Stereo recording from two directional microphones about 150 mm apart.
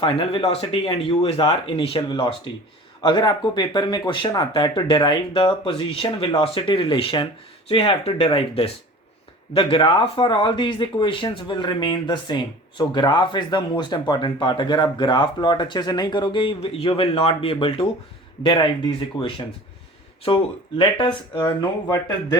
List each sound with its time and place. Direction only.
0.0 s speech: 35° left (ahead or behind)
20.2 s speech: 35° left (ahead or behind)